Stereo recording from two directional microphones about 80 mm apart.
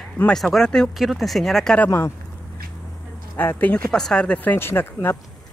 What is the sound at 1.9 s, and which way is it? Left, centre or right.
Speech, left.